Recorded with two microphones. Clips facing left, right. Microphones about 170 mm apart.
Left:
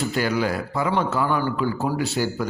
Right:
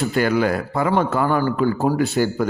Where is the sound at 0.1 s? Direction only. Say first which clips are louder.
Right 4 dB; 55° right (ahead or behind).